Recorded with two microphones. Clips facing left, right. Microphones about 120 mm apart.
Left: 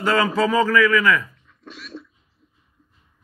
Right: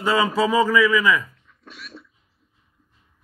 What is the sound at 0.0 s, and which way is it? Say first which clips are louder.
A man's voice: left 1 dB; 10° right (ahead or behind).